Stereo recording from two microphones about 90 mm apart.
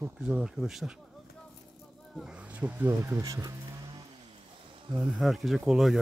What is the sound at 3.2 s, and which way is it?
Speech, 40° right (ahead or behind).